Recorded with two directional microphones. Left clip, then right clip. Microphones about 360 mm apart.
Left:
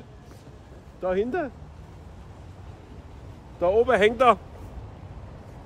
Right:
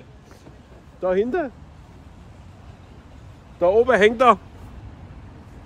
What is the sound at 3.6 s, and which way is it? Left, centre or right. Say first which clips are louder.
Speech: right 4 dB; right.